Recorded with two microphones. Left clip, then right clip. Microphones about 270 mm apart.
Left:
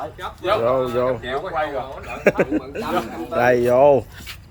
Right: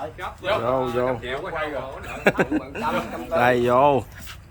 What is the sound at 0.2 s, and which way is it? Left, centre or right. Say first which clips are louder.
Speech: left 4 dB; centre.